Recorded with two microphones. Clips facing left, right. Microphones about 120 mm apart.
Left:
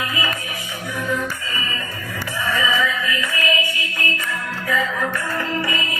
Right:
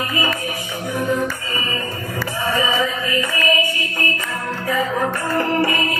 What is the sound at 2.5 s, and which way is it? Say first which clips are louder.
Music: right 1 dB; 35° right (ahead or behind).